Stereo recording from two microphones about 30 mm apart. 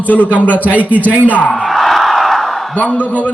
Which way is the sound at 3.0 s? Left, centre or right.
Left.